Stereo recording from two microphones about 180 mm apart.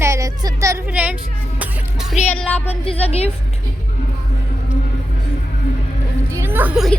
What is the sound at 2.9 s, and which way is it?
Speech, 35° left (ahead or behind).